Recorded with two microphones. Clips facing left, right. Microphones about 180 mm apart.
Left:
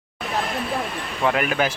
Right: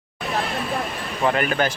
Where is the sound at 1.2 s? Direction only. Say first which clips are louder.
Even; 5° left (ahead or behind).